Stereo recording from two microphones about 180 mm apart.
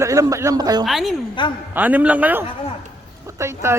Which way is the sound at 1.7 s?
10° right (ahead or behind).